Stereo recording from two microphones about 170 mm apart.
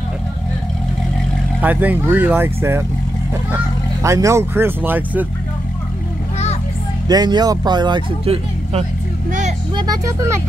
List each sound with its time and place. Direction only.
1.6 s speech: 10° right (ahead or behind)
4.0 s speech: 15° right (ahead or behind)
7.1 s speech: 25° right (ahead or behind)
9.8 s speech: 20° right (ahead or behind)